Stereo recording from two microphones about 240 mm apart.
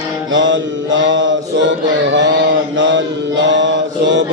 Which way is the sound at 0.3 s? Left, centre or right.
Right.